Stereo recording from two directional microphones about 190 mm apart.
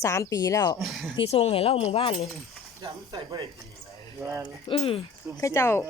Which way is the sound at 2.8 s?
15° right (ahead or behind).